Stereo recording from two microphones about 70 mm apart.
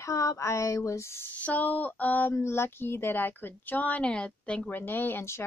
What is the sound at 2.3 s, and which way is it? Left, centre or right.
Speech, left.